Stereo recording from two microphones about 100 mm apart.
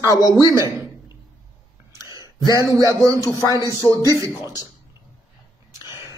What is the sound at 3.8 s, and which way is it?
Speech, 40° left (ahead or behind).